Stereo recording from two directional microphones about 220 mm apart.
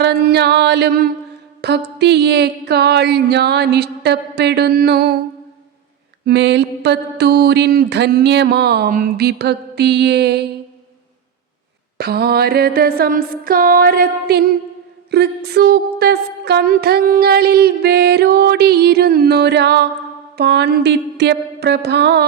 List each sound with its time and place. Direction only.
0.0 s a sound: 45° right (ahead or behind)
1.6 s music: 50° right (ahead or behind)
6.2 s music: 50° right (ahead or behind)
11.9 s music: 45° right (ahead or behind)